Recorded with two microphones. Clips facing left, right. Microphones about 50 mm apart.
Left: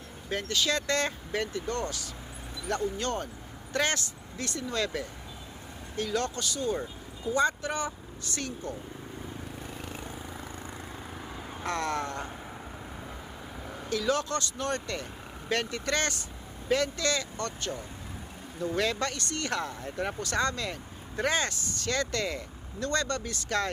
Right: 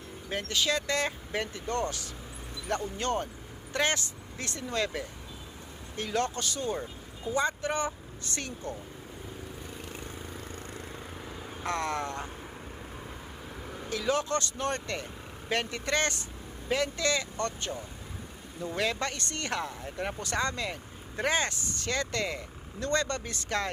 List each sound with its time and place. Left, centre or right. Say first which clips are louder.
0.3 s speech: left 1 dB; centre
6.0 s speech: even; right
7.3 s speech: left 1 dB; right
11.6 s speech: even; centre
13.9 s speech: even; centre
15.4 s speech: left 1 dB; centre
17.3 s speech: right 2 dB; right
18.6 s speech: left 2 dB; centre